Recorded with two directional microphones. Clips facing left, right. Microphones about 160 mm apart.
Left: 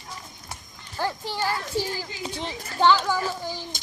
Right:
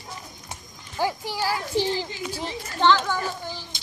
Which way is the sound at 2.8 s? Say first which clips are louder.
Even; 10° left (ahead or behind).